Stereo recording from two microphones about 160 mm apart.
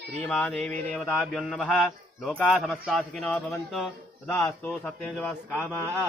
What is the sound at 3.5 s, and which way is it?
Speech, 15° left (ahead or behind).